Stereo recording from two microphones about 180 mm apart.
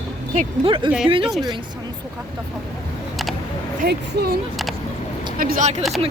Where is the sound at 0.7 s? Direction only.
30° right (ahead or behind).